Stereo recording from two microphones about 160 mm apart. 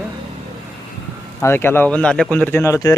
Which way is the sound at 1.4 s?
15° left (ahead or behind).